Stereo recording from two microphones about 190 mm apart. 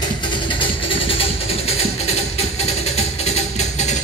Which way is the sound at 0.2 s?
25° left (ahead or behind).